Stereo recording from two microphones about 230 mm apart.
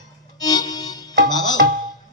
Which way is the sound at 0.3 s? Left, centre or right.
Centre.